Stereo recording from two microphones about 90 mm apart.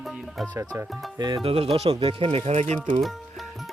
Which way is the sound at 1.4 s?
90° right.